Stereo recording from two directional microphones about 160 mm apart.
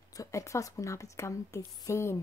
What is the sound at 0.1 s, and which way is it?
A woman's voice, 20° left (ahead or behind).